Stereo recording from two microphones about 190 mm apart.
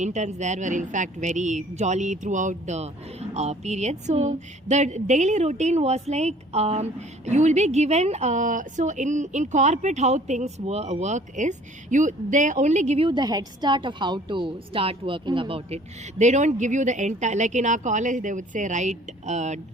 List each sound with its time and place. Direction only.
0.0 s a woman's voice: 40° right (ahead or behind)